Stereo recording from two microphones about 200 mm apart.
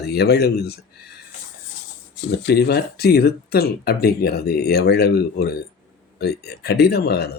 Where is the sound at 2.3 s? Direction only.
55° left (ahead or behind).